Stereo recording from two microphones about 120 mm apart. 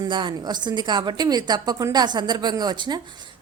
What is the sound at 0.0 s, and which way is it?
A woman's voice, 40° right (ahead or behind).